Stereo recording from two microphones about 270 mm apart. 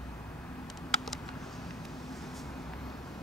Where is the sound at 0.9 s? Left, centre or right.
Centre.